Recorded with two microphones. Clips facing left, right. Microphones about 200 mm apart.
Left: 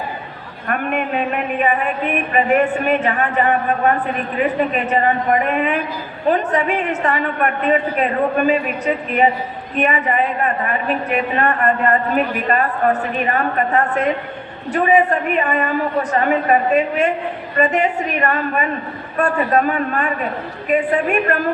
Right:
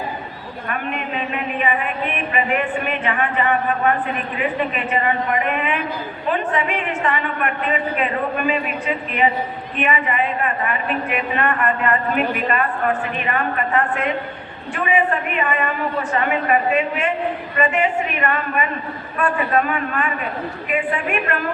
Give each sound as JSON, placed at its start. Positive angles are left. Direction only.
{"t": 0.7, "sound": "a man's voice", "side_deg": 50}
{"t": 9.7, "sound": "a woman's voice", "side_deg": 40}